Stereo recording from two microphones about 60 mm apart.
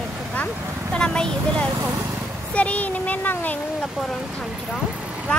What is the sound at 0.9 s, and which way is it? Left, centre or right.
Speech, centre.